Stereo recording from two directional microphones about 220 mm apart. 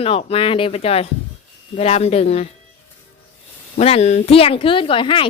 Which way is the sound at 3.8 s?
30° left (ahead or behind).